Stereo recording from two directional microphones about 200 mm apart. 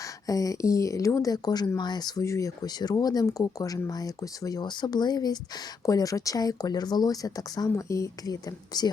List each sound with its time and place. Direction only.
0.3 s speech: 15° left (ahead or behind)